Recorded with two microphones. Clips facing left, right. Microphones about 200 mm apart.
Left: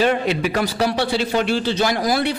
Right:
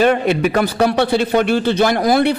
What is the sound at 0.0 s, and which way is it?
A man's voice, 55° right (ahead or behind).